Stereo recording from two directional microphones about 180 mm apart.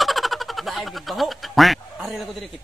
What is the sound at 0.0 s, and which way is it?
Speech, centre (ahead or behind).